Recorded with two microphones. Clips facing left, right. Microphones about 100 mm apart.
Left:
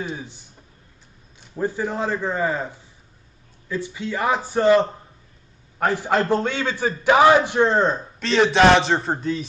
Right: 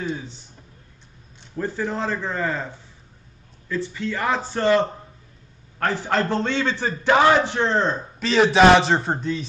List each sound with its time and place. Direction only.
0.0 s speech: 15° left (ahead or behind)
1.5 s a man's voice: 10° left (ahead or behind)
8.2 s a man's voice: centre (ahead or behind)